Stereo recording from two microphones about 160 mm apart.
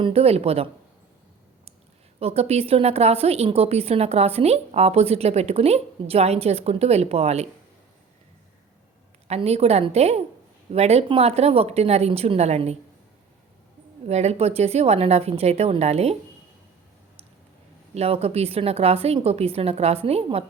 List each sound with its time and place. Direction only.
0.0 s a woman's voice: 40° right (ahead or behind)
2.1 s a woman's voice: 40° right (ahead or behind)
9.2 s a woman's voice: 40° right (ahead or behind)
14.1 s a woman's voice: 45° right (ahead or behind)
17.9 s a woman's voice: 40° right (ahead or behind)